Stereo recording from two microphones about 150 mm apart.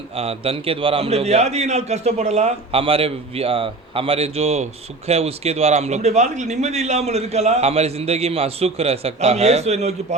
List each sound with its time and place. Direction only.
0.2 s a man's voice: 40° right (ahead or behind)